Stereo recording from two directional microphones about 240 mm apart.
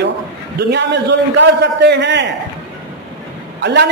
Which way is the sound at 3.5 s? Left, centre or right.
Right.